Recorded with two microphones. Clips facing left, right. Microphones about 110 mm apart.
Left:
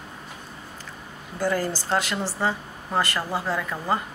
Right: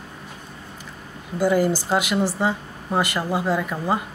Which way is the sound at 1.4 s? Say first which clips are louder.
Right 6 dB; 15° right (ahead or behind).